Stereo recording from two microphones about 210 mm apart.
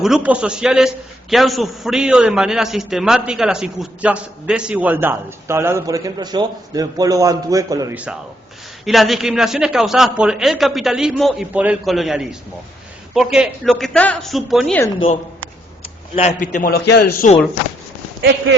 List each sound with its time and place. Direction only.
0.0 s a man's voice: 5° right (ahead or behind)
8.8 s a man's voice: centre (ahead or behind)
15.8 s a man's voice: 30° left (ahead or behind); by 17.1 s 50° left (ahead or behind)